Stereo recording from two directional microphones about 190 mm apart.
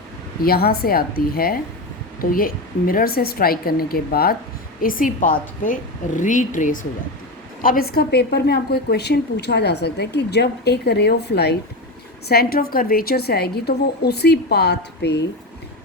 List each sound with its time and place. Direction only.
0.4 s a woman's voice: 55° left (ahead or behind)